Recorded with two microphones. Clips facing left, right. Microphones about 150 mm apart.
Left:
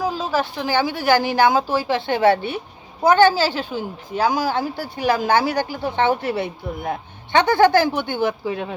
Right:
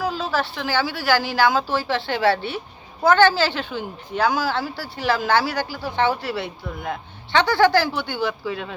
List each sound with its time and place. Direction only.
0.2 s a woman's voice: 15° left (ahead or behind)